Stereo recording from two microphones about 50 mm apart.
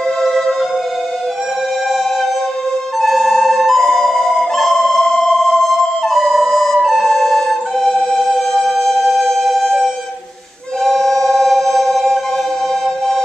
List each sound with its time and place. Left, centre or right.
0.2 s music: centre
3.0 s flute: centre
5.0 s sonar: centre
5.7 s music: centre
10.8 s music: centre